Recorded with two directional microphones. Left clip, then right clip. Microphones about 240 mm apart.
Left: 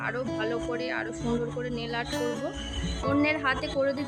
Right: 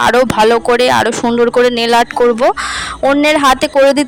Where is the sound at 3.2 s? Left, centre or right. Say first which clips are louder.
Right 17 dB; right.